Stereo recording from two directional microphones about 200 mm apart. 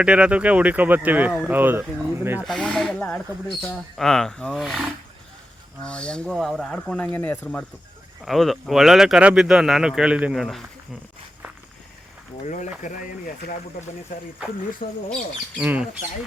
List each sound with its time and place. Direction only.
0.0 s speech: 5° right (ahead or behind)
2.5 s speech: centre (ahead or behind)
12.4 s speech: 35° left (ahead or behind)
15.1 s speech: 5° right (ahead or behind)